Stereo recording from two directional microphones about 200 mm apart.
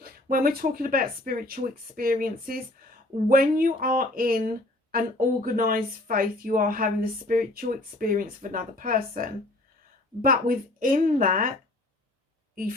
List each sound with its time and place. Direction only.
0.0 s speech: 45° right (ahead or behind)